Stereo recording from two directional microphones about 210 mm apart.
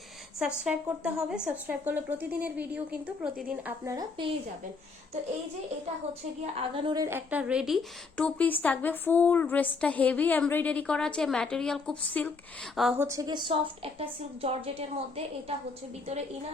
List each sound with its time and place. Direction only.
0.3 s a woman's voice: 5° right (ahead or behind)
6.4 s a woman's voice: 25° right (ahead or behind)